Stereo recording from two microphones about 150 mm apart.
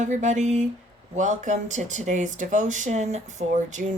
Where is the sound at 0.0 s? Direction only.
55° right (ahead or behind).